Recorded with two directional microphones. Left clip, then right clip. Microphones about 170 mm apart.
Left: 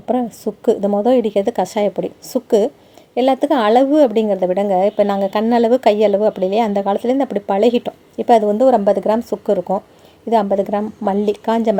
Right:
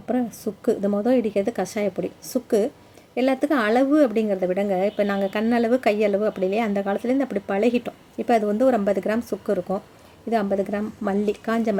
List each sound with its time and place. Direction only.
0.0 s a woman's voice: 25° left (ahead or behind)